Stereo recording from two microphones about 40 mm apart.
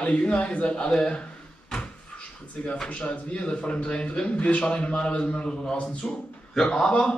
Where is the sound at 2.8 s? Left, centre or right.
Left.